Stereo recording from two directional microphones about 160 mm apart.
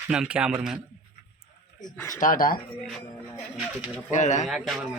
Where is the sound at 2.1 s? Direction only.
55° left (ahead or behind).